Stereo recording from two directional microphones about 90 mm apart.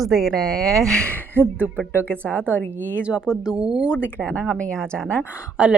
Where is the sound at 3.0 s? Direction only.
10° right (ahead or behind).